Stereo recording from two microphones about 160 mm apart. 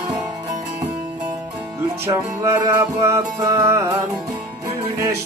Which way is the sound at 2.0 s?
20° right (ahead or behind).